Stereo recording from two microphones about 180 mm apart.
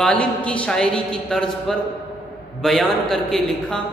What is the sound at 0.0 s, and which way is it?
A woman's voice, 5° left (ahead or behind).